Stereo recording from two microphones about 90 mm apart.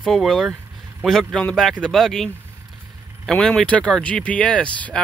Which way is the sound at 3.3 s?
5° left (ahead or behind).